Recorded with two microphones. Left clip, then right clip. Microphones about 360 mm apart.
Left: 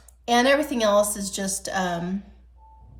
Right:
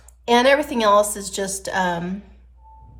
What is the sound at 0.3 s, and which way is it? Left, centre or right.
A woman's voice, centre.